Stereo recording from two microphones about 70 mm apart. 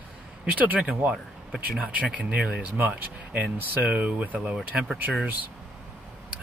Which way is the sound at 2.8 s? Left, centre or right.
Right.